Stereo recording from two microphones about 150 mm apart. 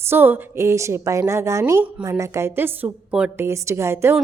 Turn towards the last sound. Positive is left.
turn(degrees=-15)  # may be behind; listen again after turning